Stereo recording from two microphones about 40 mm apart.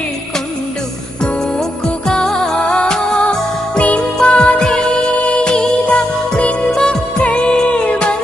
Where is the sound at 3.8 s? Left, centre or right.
Left.